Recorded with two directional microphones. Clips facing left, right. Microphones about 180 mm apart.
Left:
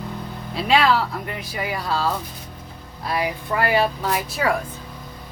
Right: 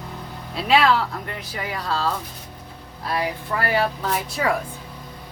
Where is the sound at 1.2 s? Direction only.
10° left (ahead or behind).